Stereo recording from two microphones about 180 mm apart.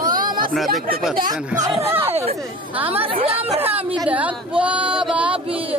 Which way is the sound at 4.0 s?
5° right (ahead or behind).